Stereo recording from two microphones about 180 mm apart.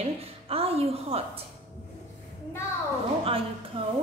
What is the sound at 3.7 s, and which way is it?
Speech, 30° right (ahead or behind).